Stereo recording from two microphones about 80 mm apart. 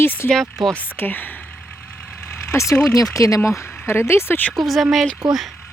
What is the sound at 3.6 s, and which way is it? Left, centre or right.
Speech, left.